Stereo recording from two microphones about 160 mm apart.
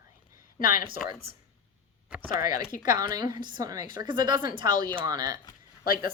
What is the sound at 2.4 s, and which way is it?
Speech, 60° left (ahead or behind).